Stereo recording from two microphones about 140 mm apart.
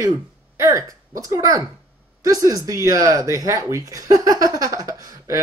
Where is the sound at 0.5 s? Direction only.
20° right (ahead or behind).